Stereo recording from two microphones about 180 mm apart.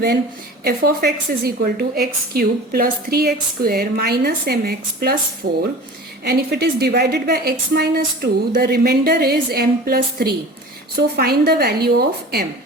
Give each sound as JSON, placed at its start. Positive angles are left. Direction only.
{"t": 0.6, "sound": "a woman's voice", "side_deg": -60}